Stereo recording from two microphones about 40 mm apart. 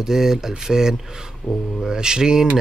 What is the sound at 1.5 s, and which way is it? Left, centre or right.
Speech, left.